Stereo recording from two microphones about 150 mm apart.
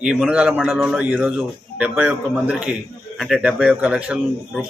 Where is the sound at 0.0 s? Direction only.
5° right (ahead or behind).